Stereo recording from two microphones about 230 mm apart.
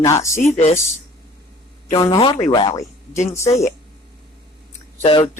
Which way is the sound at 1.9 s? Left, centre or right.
Centre.